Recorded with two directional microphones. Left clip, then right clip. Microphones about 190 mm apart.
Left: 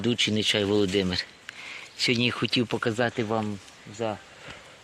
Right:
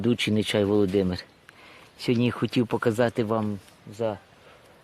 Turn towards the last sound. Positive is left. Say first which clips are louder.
# right 2 dB
turn(degrees=-55)  # may be behind; listen again after turning